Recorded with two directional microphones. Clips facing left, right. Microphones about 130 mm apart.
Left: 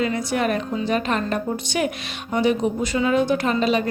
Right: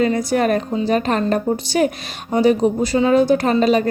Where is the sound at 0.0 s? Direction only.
40° right (ahead or behind).